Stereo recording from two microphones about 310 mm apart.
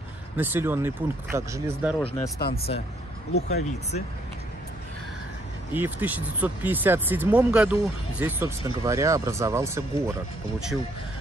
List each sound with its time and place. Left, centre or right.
0.4 s speech: centre
2.1 s speech: centre
3.3 s speech: left
5.7 s speech: centre